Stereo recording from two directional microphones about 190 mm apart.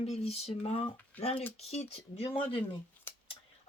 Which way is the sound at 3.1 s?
10° left (ahead or behind).